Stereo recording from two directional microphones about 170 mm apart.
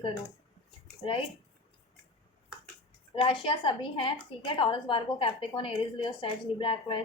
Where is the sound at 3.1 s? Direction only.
30° left (ahead or behind).